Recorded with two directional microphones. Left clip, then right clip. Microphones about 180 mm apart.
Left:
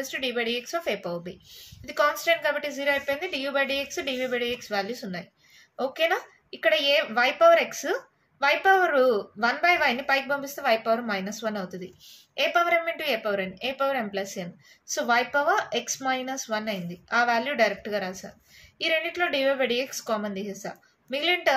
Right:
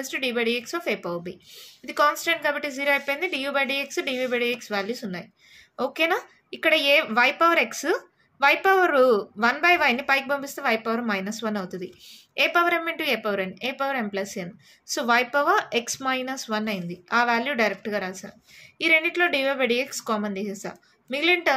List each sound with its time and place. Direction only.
0.0 s a woman's voice: 35° right (ahead or behind)